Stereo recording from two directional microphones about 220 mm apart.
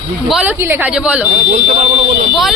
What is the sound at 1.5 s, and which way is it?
Speech, 35° right (ahead or behind).